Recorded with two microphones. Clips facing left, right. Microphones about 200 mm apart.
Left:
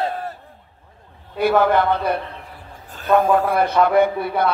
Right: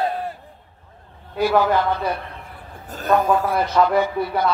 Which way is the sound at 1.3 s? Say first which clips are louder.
Left 2 dB; 55° left (ahead or behind).